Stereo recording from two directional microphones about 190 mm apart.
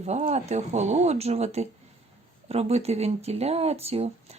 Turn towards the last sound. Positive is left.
turn(degrees=-35)  # may be behind; listen again after turning